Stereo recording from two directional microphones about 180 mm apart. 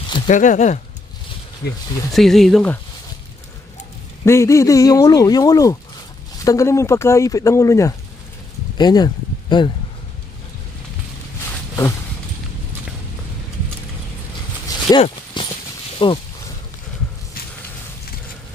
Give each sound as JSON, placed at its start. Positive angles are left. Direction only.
{"t": 0.3, "sound": "speech", "side_deg": 45}
{"t": 2.1, "sound": "speech", "side_deg": 0}
{"t": 4.2, "sound": "speech", "side_deg": 15}
{"t": 8.7, "sound": "a sound", "side_deg": 25}
{"t": 14.9, "sound": "horse", "side_deg": 25}
{"t": 16.0, "sound": "a sound", "side_deg": 25}